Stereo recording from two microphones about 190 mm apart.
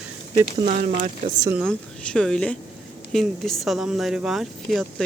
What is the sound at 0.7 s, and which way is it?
Speech, 40° right (ahead or behind).